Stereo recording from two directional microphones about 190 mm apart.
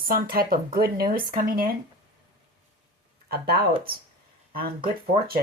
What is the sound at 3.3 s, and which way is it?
Speech, 55° right (ahead or behind).